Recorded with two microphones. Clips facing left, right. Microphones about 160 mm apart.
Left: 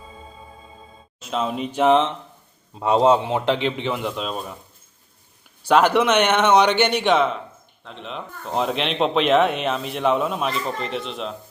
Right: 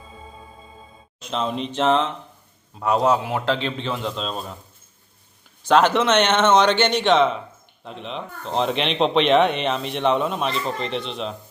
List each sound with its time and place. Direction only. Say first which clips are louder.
1.2 s a man's voice: left 1 dB; 5° left (ahead or behind)
2.7 s a man's voice: left 3 dB; 25° left (ahead or behind); by 4.5 s 10° left (ahead or behind)
5.6 s a man's voice: even; 10° left (ahead or behind)